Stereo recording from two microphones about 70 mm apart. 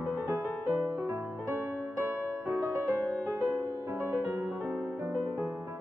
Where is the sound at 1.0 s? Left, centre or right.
Right.